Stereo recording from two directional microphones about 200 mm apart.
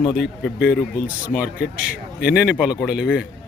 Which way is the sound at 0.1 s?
Centre (ahead or behind).